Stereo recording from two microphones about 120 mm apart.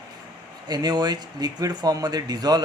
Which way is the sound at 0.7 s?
35° right (ahead or behind).